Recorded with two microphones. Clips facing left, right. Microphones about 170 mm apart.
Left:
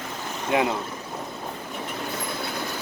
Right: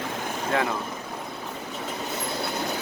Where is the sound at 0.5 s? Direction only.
15° left (ahead or behind).